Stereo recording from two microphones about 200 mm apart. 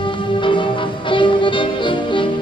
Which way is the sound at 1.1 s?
25° left (ahead or behind).